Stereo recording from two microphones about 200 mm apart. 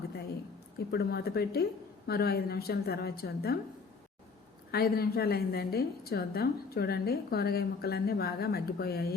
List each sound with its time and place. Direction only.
0.9 s a woman's voice: 50° left (ahead or behind)
4.7 s a woman's voice: 50° left (ahead or behind)